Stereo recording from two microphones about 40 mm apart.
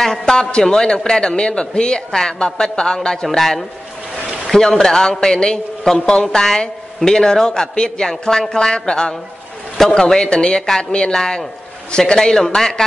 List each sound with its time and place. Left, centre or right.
0.2 s a man's voice: centre
3.3 s a woman's voice: centre
9.8 s a woman's voice: centre